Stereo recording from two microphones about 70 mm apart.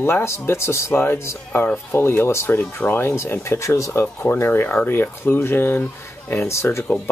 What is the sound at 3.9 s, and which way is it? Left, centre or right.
Speech, left.